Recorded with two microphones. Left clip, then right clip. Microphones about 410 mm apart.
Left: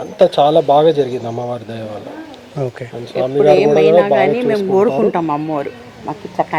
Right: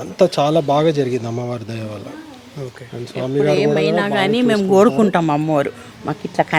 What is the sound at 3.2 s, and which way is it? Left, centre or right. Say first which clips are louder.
Speech: left 6 dB; right.